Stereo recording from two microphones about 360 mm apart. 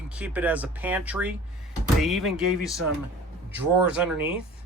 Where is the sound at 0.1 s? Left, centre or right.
Centre.